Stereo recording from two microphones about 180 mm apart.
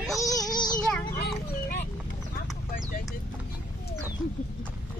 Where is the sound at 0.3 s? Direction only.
20° left (ahead or behind).